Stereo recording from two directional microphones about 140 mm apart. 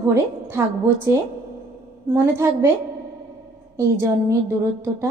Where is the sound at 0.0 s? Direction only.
20° right (ahead or behind).